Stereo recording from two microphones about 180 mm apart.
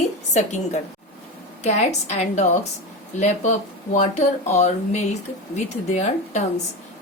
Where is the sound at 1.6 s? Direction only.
40° left (ahead or behind).